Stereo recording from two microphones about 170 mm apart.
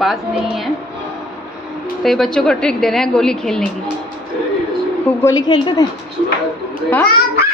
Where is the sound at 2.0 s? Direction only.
Centre (ahead or behind).